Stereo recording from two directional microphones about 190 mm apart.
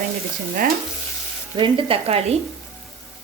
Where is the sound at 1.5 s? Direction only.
25° right (ahead or behind).